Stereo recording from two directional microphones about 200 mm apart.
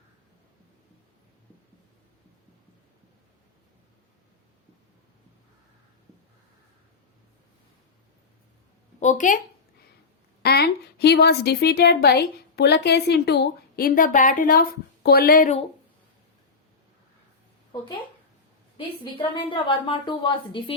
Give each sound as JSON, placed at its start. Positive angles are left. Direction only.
{"t": 9.0, "sound": "speech", "side_deg": 40}
{"t": 10.4, "sound": "a woman's voice", "side_deg": 50}
{"t": 19.0, "sound": "a woman's voice", "side_deg": 25}